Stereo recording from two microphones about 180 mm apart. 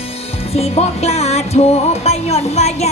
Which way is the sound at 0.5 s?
35° left (ahead or behind).